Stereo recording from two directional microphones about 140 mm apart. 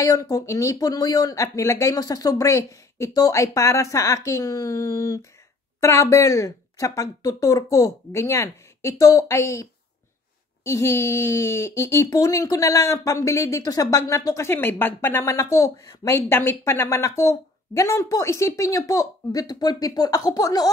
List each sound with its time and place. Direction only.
0.0 s speech: 25° left (ahead or behind)